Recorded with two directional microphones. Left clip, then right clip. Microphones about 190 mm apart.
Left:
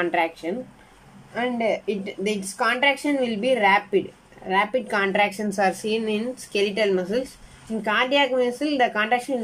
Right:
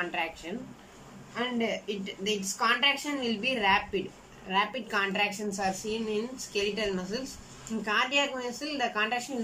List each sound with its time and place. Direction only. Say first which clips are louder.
0.0 s a woman's voice: left 9 dB; 50° left (ahead or behind)